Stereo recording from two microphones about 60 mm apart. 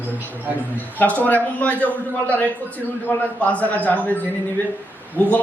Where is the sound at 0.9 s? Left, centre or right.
Left.